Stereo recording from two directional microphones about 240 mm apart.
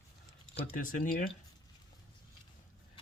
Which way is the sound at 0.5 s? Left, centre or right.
Left.